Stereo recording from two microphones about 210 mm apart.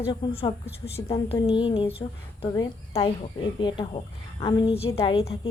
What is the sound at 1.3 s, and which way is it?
Speech, 15° left (ahead or behind).